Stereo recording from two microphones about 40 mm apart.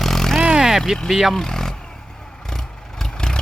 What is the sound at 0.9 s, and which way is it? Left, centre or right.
Speech, centre.